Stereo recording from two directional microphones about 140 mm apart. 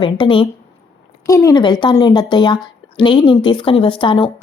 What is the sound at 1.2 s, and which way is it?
A woman's voice, 25° left (ahead or behind).